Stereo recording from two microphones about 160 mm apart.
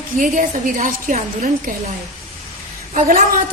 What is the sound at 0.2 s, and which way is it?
A woman's voice, 60° right (ahead or behind).